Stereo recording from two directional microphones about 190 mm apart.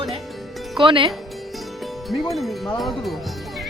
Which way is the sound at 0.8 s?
25° right (ahead or behind).